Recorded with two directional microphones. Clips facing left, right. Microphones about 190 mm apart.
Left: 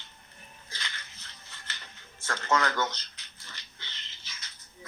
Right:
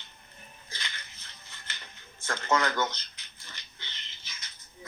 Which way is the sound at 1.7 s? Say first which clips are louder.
Even; 15° right (ahead or behind).